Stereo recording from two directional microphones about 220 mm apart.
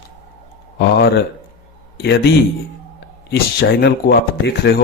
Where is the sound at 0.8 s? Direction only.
50° left (ahead or behind).